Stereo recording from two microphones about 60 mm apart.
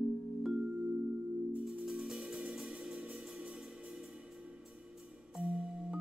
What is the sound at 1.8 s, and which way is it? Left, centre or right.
Music, centre.